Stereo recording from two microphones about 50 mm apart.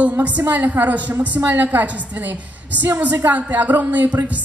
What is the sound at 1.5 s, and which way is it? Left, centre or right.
Speech, right.